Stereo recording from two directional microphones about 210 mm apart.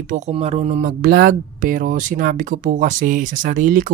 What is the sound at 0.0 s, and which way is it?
Speech, 40° right (ahead or behind).